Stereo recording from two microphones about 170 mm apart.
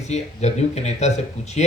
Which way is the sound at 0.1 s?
40° left (ahead or behind).